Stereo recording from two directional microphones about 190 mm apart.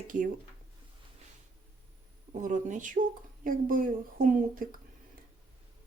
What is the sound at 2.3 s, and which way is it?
Speech, 40° right (ahead or behind).